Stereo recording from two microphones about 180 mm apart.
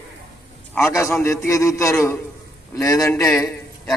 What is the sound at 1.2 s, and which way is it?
A man's voice, 15° left (ahead or behind).